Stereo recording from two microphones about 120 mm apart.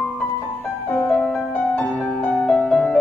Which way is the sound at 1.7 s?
10° left (ahead or behind).